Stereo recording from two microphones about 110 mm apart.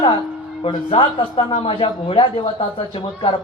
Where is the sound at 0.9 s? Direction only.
50° left (ahead or behind).